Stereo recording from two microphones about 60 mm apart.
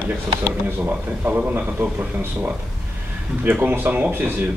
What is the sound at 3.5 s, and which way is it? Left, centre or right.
Speech, right.